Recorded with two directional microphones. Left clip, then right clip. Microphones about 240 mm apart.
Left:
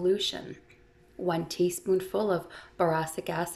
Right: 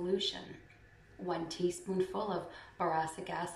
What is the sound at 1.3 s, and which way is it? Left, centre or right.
Speech, left.